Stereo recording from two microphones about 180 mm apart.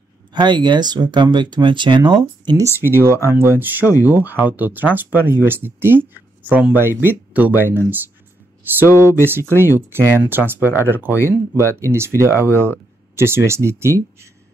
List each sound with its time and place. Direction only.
0.3 s speech: 25° right (ahead or behind)